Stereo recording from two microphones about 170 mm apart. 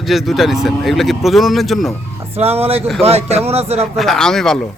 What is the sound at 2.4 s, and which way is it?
Speech, 35° right (ahead or behind).